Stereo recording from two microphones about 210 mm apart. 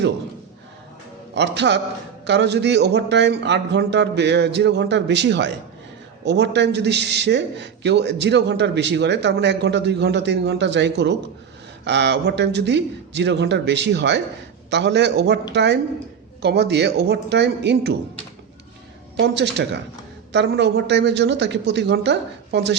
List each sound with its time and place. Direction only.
1.4 s a man's voice: 55° right (ahead or behind)
19.2 s a man's voice: 55° right (ahead or behind)